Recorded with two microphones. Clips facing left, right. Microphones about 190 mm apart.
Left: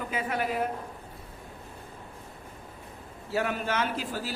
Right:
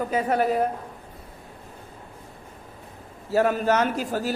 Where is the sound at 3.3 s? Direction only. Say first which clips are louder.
Right 8 dB; 40° right (ahead or behind).